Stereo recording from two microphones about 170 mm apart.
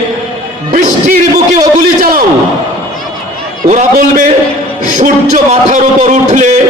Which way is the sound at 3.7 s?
45° right (ahead or behind).